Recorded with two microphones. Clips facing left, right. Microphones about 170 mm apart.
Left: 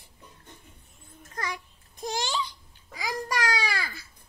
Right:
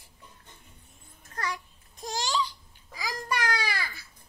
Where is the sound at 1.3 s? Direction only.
20° left (ahead or behind).